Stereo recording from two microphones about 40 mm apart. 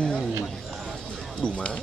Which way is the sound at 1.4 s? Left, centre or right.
Left.